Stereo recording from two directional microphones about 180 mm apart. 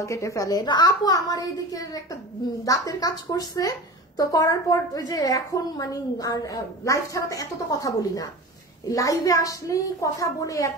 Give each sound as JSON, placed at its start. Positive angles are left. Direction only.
{"t": 0.0, "sound": "a woman's voice", "side_deg": 15}